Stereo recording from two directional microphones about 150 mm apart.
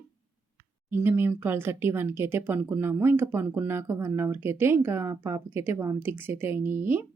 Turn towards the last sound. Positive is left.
turn(degrees=-15)  # may be behind; listen again after turning